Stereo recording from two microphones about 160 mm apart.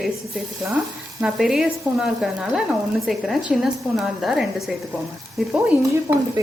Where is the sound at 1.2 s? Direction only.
5° right (ahead or behind).